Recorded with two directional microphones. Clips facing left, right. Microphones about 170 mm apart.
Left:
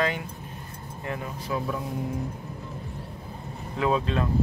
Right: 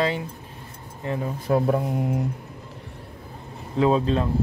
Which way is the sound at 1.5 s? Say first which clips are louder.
Right 9 dB; 55° right (ahead or behind).